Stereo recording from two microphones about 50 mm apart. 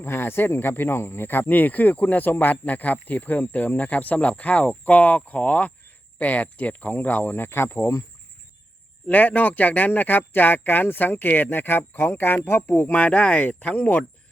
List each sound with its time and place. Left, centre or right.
0.0 s speech: left
9.0 s speech: left
12.4 s speech: left
12.9 s speech: left